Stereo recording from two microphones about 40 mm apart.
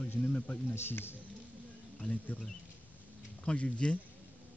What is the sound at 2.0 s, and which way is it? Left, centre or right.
Speech, left.